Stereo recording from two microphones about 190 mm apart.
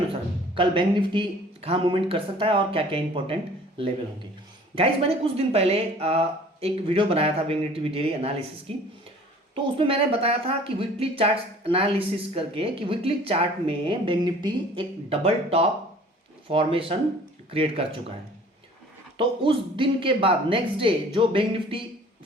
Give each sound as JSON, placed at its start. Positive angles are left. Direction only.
{"t": 0.1, "sound": "speech", "side_deg": -30}
{"t": 9.7, "sound": "speech", "side_deg": -30}
{"t": 19.1, "sound": "speech", "side_deg": -25}